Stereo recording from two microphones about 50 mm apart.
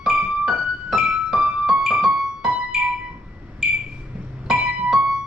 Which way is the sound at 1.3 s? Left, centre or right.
Right.